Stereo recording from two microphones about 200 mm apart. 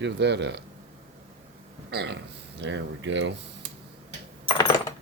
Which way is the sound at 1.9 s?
60° right (ahead or behind).